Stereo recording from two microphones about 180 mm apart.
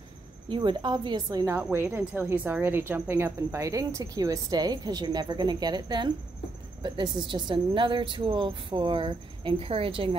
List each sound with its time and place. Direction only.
0.5 s a woman's voice: 25° right (ahead or behind)